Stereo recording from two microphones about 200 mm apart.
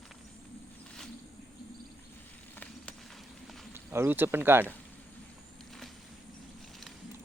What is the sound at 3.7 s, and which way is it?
Speech, 10° right (ahead or behind).